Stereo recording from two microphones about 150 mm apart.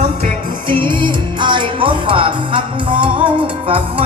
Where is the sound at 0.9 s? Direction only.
30° right (ahead or behind).